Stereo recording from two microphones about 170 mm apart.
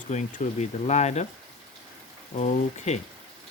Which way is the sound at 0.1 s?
45° left (ahead or behind).